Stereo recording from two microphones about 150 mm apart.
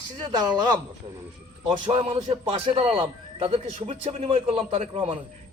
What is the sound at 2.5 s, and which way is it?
A man's voice, 40° right (ahead or behind).